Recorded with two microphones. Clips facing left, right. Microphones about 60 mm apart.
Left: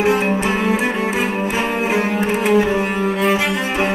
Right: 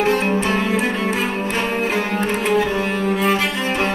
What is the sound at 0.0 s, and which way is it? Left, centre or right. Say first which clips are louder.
Music: left 1 dB; centre.